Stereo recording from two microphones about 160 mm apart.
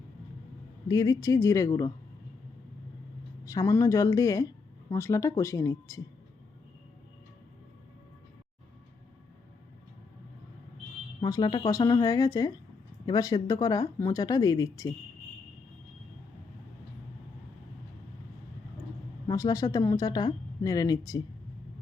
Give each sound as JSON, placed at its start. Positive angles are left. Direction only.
{"t": 0.9, "sound": "speech", "side_deg": 25}
{"t": 3.4, "sound": "speech", "side_deg": 20}
{"t": 11.2, "sound": "speech", "side_deg": 25}
{"t": 19.3, "sound": "speech", "side_deg": 20}